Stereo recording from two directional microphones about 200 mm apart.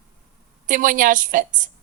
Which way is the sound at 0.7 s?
40° right (ahead or behind).